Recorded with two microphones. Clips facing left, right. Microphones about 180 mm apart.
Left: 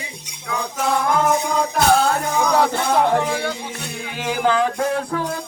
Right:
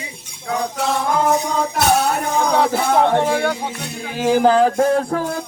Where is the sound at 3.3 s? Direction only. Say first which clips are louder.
Right 5 dB; 55° right (ahead or behind).